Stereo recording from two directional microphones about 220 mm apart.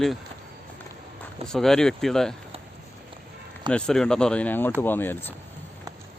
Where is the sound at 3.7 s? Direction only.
5° left (ahead or behind).